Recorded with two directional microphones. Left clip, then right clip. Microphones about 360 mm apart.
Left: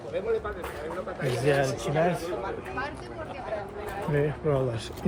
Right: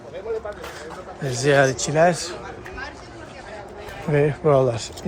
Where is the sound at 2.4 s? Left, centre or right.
Centre.